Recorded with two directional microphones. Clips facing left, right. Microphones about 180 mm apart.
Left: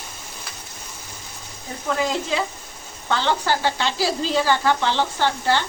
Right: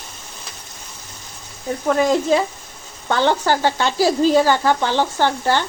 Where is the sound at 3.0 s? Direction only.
50° right (ahead or behind).